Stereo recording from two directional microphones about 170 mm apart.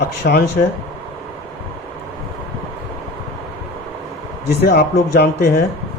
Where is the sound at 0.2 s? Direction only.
75° left (ahead or behind).